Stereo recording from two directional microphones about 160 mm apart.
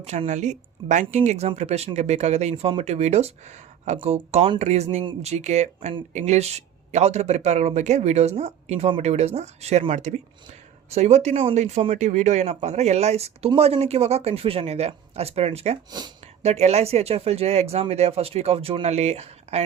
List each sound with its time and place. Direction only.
0.0 s speech: 45° right (ahead or behind)
15.9 s speech: 25° right (ahead or behind)
16.4 s speech: 40° right (ahead or behind)